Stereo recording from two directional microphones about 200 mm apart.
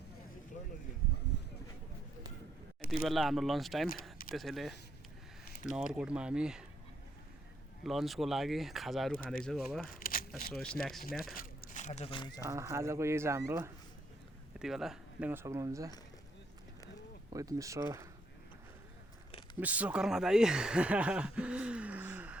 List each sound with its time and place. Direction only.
1.3 s a sound: 60° left (ahead or behind)
3.0 s speech: centre (ahead or behind)
7.9 s speech: centre (ahead or behind)
9.8 s a sound: 45° left (ahead or behind)
10.5 s speech: 5° left (ahead or behind)
11.3 s speech: 40° left (ahead or behind); by 12.5 s 25° left (ahead or behind)
12.5 s speech: 15° right (ahead or behind)
14.6 s speech: centre (ahead or behind)
17.3 s speech: 15° right (ahead or behind)
19.5 s speech: 10° right (ahead or behind)